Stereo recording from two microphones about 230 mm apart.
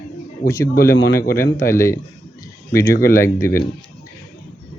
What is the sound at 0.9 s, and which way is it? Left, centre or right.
Speech, left.